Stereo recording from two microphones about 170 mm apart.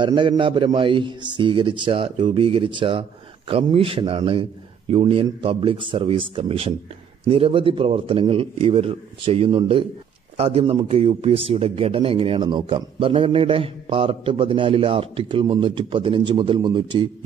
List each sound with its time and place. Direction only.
0.0 s speech: 30° right (ahead or behind)